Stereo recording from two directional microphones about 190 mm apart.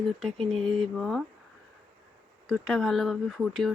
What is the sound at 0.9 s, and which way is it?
Speech, centre (ahead or behind).